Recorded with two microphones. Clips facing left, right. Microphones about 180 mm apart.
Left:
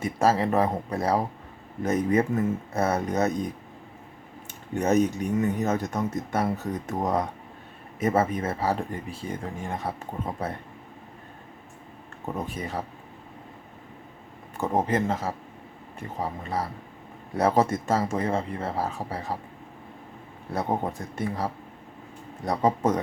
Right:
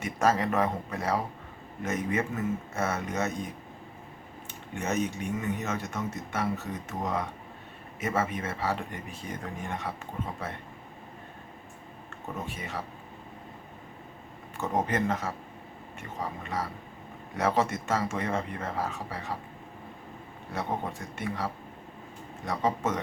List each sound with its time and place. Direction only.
0.0 s speech: 30° left (ahead or behind)
4.7 s speech: 40° left (ahead or behind)
12.5 s speech: 40° left (ahead or behind)
14.6 s speech: 30° left (ahead or behind)
20.5 s speech: 40° left (ahead or behind)
22.4 s speech: 35° left (ahead or behind)